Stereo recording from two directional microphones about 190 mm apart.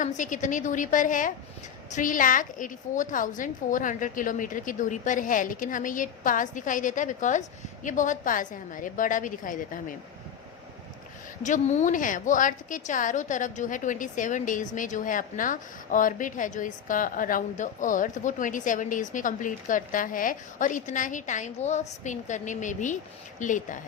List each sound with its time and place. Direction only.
0.2 s a woman's voice: 40° left (ahead or behind)
11.4 s a woman's voice: 40° left (ahead or behind)